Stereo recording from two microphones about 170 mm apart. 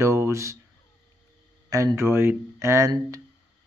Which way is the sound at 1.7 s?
20° right (ahead or behind).